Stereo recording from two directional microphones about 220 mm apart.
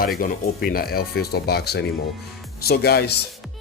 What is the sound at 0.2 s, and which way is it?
Speech, 40° left (ahead or behind).